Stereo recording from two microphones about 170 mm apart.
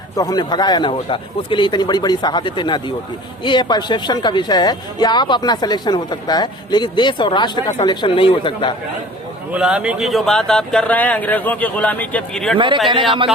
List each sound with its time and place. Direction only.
0.2 s speech: 25° left (ahead or behind)
9.5 s speech: 5° right (ahead or behind)
12.5 s a man's voice: 30° right (ahead or behind)